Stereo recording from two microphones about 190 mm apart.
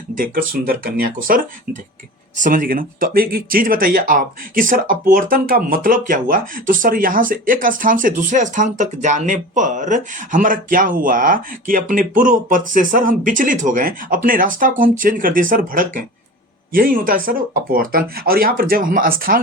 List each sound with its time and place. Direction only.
0.1 s speech: 50° right (ahead or behind)